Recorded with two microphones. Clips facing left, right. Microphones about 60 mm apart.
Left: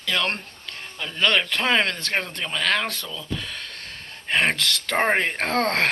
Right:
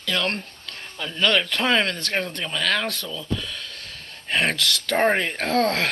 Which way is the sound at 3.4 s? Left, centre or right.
Left.